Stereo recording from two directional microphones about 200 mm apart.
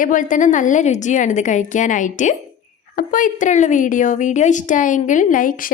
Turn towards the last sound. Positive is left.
turn(degrees=40)  # may be behind; listen again after turning